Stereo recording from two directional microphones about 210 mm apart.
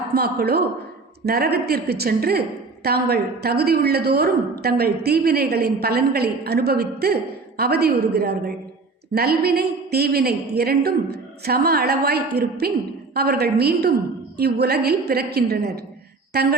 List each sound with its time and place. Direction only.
0.1 s a woman's voice: 50° right (ahead or behind)